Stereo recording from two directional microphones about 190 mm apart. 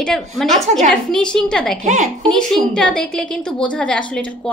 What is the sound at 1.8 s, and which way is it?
Speech, 40° right (ahead or behind).